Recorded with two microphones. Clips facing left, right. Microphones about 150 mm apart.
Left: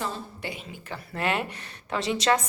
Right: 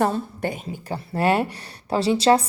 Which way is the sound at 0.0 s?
50° right (ahead or behind).